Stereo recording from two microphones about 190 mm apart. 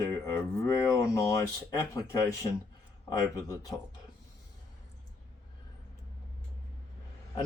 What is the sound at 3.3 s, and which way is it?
Speech, 15° left (ahead or behind).